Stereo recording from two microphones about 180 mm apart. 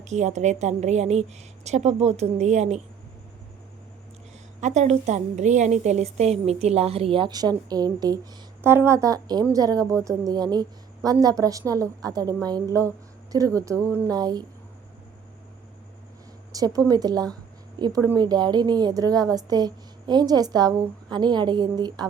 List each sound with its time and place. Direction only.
0.0 s a woman's voice: 40° right (ahead or behind)
4.6 s a woman's voice: 40° right (ahead or behind); by 14.4 s 20° right (ahead or behind)
16.5 s a woman's voice: 20° right (ahead or behind)